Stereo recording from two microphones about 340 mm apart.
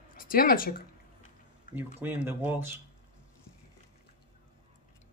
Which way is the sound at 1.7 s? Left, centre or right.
Centre.